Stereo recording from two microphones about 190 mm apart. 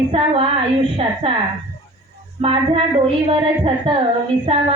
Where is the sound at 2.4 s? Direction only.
30° right (ahead or behind).